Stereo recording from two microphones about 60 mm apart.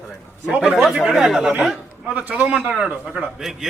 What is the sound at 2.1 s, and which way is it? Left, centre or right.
Speech, right.